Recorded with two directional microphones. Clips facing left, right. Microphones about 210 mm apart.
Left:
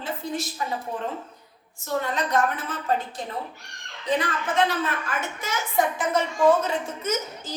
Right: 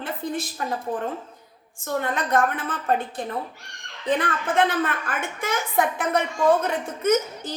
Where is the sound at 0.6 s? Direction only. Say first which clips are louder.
Right 2 dB; 55° right (ahead or behind).